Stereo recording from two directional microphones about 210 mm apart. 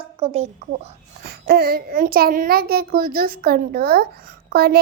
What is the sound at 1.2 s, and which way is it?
A child's voice, 45° right (ahead or behind).